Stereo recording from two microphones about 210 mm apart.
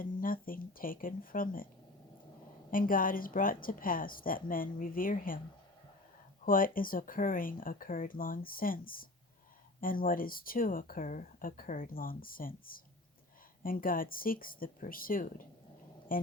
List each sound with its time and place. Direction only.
0.0 s speech: 40° left (ahead or behind)
2.6 s speech: 40° left (ahead or behind)
6.4 s speech: 40° left (ahead or behind)